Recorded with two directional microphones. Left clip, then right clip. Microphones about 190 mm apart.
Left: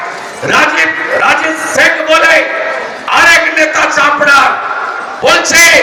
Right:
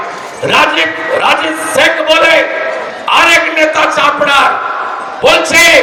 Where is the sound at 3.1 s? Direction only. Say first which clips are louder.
Left 1 dB; 55° right (ahead or behind).